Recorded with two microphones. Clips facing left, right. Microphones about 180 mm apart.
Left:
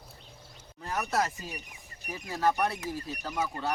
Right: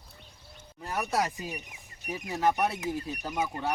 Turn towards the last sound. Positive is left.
turn(degrees=-15)  # may be behind; listen again after turning